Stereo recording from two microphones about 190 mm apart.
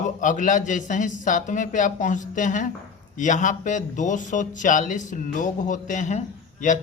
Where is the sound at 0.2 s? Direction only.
40° left (ahead or behind).